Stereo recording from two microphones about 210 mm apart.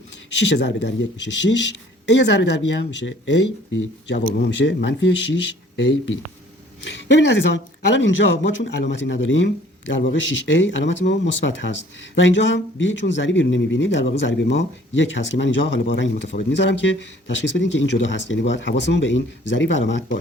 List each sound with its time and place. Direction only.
0.3 s a man's voice: 60° left (ahead or behind)